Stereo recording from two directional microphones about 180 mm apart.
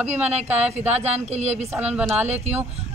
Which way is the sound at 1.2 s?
40° right (ahead or behind).